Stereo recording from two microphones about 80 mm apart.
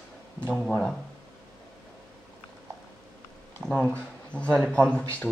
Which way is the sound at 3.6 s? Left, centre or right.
Centre.